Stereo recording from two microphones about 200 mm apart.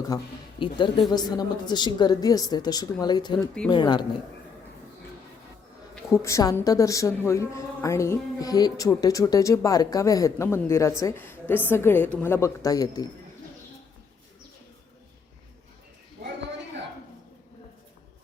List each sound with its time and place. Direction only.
0.1 s a woman's voice: 15° left (ahead or behind)
6.1 s speech: 15° left (ahead or behind)